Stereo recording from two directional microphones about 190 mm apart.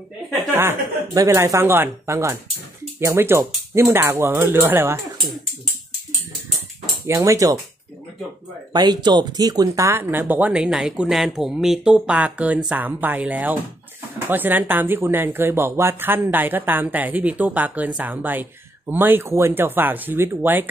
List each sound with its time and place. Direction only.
0.6 s speech: 15° right (ahead or behind)
7.1 s speech: 15° right (ahead or behind)
8.7 s speech: 20° right (ahead or behind)